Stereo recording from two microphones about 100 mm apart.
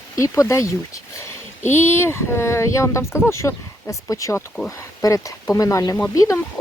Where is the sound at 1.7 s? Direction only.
25° left (ahead or behind).